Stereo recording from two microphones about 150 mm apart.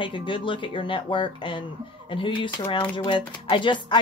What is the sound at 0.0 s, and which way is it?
Speech, 35° left (ahead or behind).